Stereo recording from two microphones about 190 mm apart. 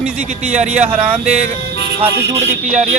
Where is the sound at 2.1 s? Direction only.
65° right (ahead or behind).